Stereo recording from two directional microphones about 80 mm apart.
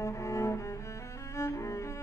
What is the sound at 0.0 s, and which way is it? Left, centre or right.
Cello, left.